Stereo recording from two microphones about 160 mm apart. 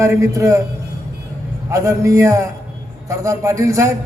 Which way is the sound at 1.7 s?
20° right (ahead or behind).